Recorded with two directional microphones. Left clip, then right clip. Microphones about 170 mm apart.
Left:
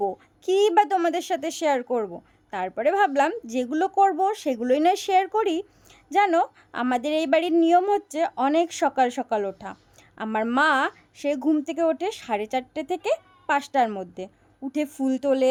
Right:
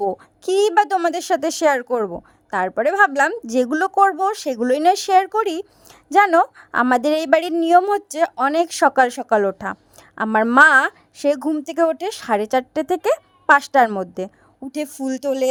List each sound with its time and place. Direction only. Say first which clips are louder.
0.0 s a woman's voice: right 5 dB; 35° right (ahead or behind)